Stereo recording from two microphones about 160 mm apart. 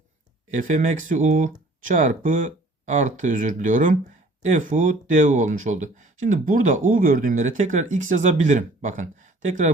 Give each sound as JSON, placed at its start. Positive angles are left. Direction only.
{"t": 0.5, "sound": "speech", "side_deg": -50}